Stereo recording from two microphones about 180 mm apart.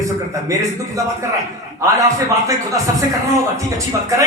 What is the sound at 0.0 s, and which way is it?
A man's voice, 15° right (ahead or behind).